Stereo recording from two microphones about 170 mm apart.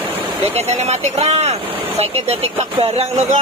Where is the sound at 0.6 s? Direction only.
40° right (ahead or behind).